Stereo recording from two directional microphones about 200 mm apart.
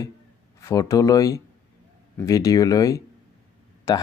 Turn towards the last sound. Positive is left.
turn(degrees=20)  # may be behind; listen again after turning